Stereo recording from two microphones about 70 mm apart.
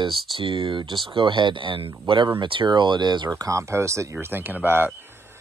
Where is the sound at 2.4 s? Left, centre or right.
Right.